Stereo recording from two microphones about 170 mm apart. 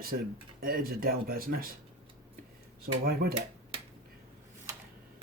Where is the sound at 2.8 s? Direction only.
65° right (ahead or behind).